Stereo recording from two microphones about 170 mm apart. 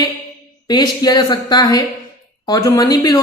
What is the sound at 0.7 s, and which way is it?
Speech, 25° left (ahead or behind).